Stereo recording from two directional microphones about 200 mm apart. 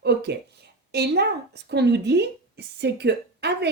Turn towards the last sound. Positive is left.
turn(degrees=-55)  # may be behind; listen again after turning